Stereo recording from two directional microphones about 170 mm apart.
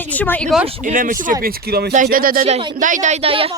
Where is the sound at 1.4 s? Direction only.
65° right (ahead or behind).